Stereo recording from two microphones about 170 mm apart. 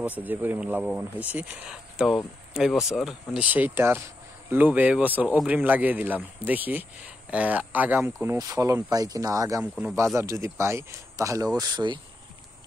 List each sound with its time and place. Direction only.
0.2 s speech: 10° right (ahead or behind); by 12.0 s 25° right (ahead or behind)